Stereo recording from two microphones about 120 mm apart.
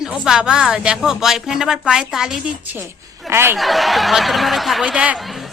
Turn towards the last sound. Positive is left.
turn(degrees=0)  # may be behind; listen again after turning